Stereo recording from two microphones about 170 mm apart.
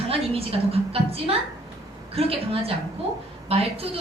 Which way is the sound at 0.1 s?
35° right (ahead or behind).